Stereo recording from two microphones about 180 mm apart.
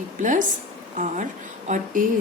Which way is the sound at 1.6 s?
45° right (ahead or behind).